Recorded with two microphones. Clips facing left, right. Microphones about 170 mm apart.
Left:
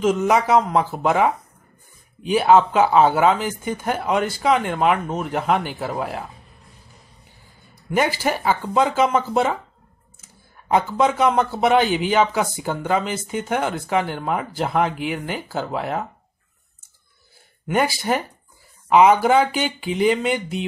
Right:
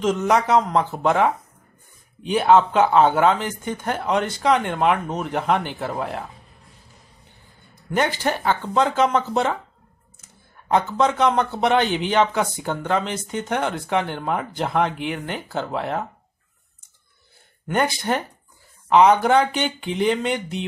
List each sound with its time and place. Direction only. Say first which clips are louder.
0.0 s speech: left 1 dB; 5° left (ahead or behind)
7.9 s speech: left 1 dB; 5° left (ahead or behind)
17.6 s speech: left 1 dB; 5° left (ahead or behind)